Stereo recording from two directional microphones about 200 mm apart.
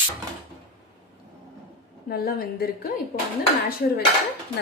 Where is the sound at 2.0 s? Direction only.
50° left (ahead or behind).